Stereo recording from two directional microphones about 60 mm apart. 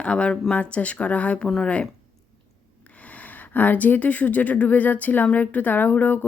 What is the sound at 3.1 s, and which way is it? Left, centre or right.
Speech, left.